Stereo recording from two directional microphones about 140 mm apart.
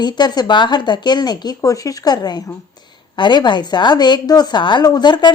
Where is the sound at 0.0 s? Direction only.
30° left (ahead or behind).